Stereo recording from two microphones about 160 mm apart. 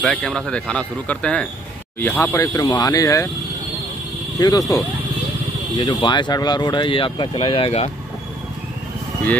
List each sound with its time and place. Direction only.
0.0 s speech: 5° left (ahead or behind); by 3.3 s 20° left (ahead or behind)
4.4 s speech: 25° left (ahead or behind)